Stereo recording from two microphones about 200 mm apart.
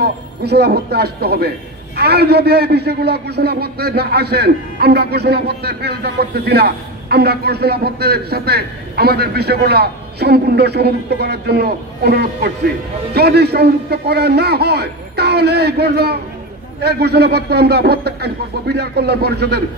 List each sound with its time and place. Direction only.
0.0 s a man's voice: 55° right (ahead or behind)